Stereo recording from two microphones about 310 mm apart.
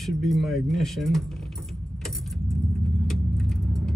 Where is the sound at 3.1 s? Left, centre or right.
Centre.